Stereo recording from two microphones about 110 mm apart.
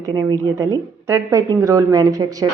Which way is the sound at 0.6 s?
25° right (ahead or behind).